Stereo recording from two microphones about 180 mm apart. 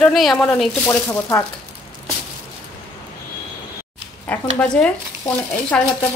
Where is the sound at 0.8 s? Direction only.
15° left (ahead or behind).